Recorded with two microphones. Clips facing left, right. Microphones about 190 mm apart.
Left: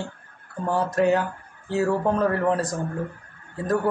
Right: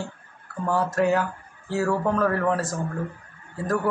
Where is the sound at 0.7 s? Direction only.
20° left (ahead or behind).